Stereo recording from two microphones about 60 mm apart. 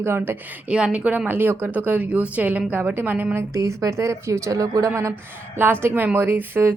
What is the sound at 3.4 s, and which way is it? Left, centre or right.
Speech, right.